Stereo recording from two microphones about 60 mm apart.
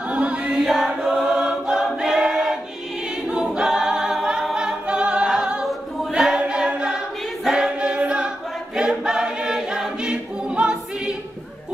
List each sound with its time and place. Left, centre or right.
0.1 s choir: centre
0.6 s choir: centre
3.5 s a capella: centre
7.4 s choir: centre